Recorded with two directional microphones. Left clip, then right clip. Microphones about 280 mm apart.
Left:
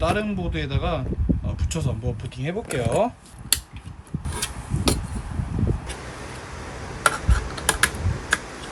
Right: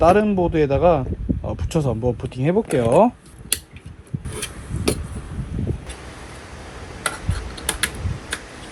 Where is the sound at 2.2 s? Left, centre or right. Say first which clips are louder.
Right 9 dB; centre.